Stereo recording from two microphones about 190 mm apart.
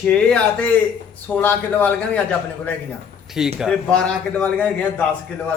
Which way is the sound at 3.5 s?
Centre (ahead or behind).